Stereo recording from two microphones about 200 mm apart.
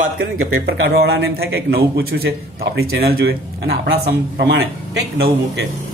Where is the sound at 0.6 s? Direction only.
55° right (ahead or behind).